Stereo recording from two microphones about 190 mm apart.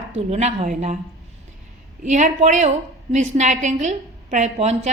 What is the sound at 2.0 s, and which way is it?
Speech, 40° right (ahead or behind).